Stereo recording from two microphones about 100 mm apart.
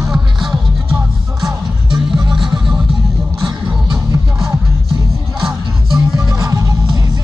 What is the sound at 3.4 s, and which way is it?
Music, 35° right (ahead or behind).